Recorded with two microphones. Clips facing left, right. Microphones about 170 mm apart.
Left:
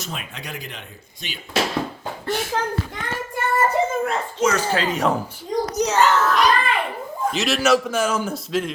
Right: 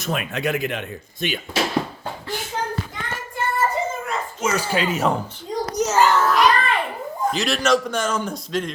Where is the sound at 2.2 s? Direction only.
75° left (ahead or behind).